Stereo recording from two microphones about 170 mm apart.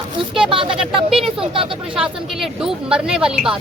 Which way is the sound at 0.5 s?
30° right (ahead or behind).